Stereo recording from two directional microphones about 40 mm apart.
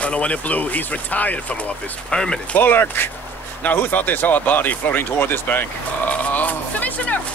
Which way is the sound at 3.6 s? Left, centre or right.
Left.